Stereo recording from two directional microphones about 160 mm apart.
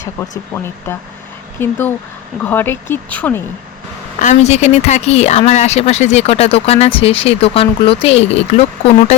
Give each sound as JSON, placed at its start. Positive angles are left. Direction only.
{"t": 0.5, "sound": "speech", "side_deg": 20}
{"t": 4.2, "sound": "speech", "side_deg": 45}